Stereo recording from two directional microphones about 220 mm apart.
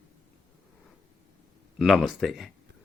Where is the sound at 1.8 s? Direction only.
Centre (ahead or behind).